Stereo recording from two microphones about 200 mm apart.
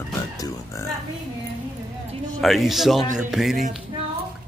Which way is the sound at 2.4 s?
Centre (ahead or behind).